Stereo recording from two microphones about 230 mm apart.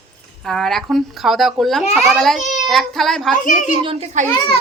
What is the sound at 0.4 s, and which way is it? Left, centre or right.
Speech, centre.